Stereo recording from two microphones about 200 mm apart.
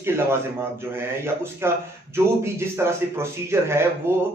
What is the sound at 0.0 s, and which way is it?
A man's voice, 10° right (ahead or behind).